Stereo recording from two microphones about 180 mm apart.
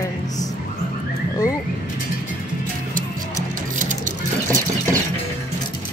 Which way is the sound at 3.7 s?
45° right (ahead or behind).